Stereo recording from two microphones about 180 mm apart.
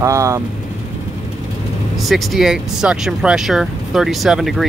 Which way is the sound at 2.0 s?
Centre (ahead or behind).